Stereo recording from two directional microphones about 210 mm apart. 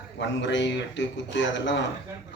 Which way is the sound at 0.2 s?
60° left (ahead or behind).